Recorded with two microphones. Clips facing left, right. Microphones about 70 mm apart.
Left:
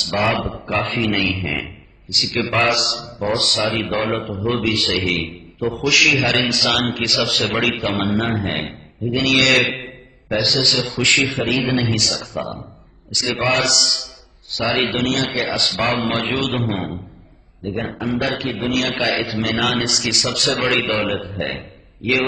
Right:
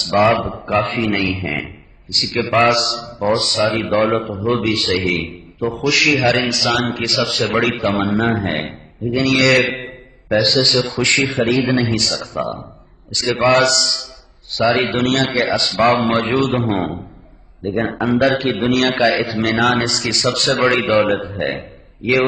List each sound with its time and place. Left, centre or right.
0.0 s a man's voice: right
1.6 s a man's voice: right
3.3 s a man's voice: right
4.6 s a man's voice: right
9.8 s a man's voice: right
15.0 s a man's voice: right
15.6 s a man's voice: right
15.9 s a man's voice: right
17.6 s a man's voice: right
18.9 s a man's voice: right